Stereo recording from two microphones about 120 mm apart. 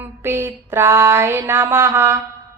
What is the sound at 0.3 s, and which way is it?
Mantra, 20° right (ahead or behind).